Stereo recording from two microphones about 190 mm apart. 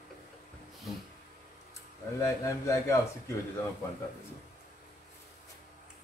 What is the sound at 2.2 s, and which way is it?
Speech, 15° left (ahead or behind).